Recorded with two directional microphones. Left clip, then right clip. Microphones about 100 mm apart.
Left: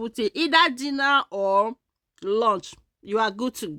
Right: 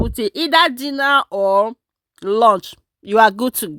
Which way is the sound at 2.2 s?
90° right.